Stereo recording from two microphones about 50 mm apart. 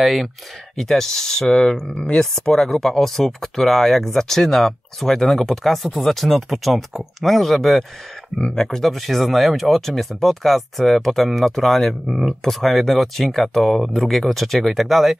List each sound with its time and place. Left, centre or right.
0.0 s speech: centre
8.4 s speech: centre
8.6 s speech: centre